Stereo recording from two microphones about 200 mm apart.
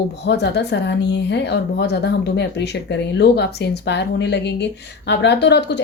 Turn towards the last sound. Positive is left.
turn(degrees=55)  # may be behind; listen again after turning